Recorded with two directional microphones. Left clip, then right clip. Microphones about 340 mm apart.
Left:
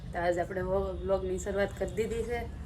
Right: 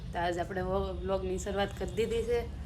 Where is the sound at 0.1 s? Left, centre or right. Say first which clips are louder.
Left 2 dB; centre.